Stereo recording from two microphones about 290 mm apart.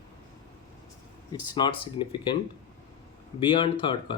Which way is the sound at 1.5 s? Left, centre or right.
Centre.